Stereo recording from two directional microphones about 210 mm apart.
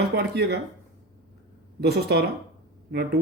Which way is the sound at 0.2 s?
50° right (ahead or behind).